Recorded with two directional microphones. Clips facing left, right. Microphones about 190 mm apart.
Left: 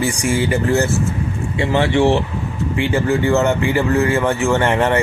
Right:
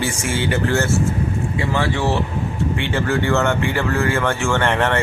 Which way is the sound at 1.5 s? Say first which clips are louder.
Left 7 dB; 20° left (ahead or behind).